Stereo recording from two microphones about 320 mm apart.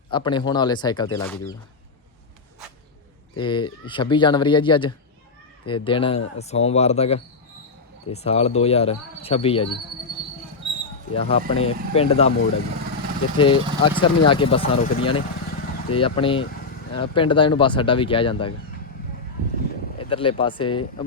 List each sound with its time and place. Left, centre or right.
0.1 s speech: centre
3.3 s speech: centre
11.1 s speech: centre
13.3 s speech: centre
20.0 s speech: centre